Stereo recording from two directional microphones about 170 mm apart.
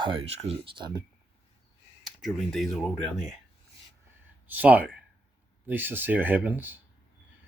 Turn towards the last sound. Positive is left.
turn(degrees=-10)  # may be behind; listen again after turning